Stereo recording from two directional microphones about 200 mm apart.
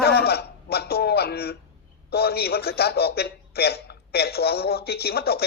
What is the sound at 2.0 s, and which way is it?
A woman's voice, 50° left (ahead or behind).